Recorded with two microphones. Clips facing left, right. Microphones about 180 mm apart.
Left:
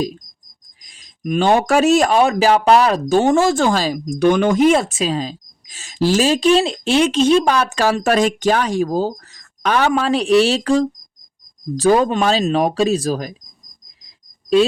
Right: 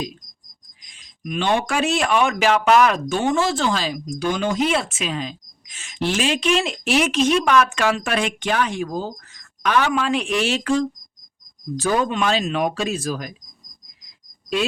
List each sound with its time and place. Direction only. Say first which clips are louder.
0.8 s speech: left 6 dB; 40° left (ahead or behind)